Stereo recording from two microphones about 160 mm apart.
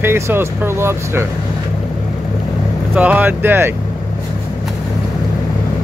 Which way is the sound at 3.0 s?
10° right (ahead or behind).